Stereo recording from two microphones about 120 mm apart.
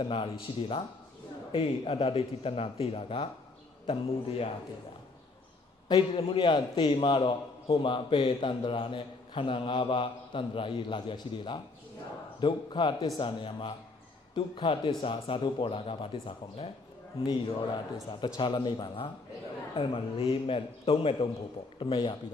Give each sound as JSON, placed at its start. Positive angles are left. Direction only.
{"t": 0.0, "sound": "a man's voice", "side_deg": 50}
{"t": 5.9, "sound": "a man's voice", "side_deg": 50}